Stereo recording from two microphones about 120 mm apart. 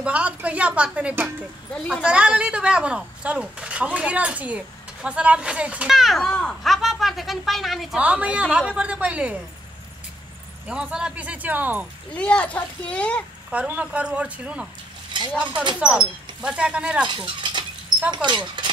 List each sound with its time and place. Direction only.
0.0 s speech: 10° right (ahead or behind)
1.7 s speech: 10° left (ahead or behind)
2.0 s speech: 10° right (ahead or behind)
10.7 s speech: 5° right (ahead or behind)
12.1 s speech: 10° left (ahead or behind)
13.5 s speech: 10° right (ahead or behind)
15.8 s speech: 10° right (ahead or behind)
17.1 s speech: 40° right (ahead or behind)